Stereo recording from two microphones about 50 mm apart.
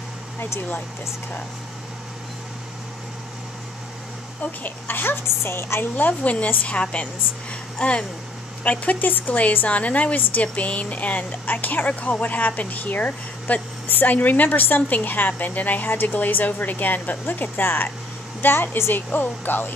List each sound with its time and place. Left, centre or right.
0.6 s a woman's voice: left
4.4 s a woman's voice: left
5.9 s a woman's voice: left
8.6 s a woman's voice: left
9.7 s a woman's voice: left